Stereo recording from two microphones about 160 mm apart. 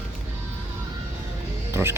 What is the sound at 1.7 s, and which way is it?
Music, 15° right (ahead or behind).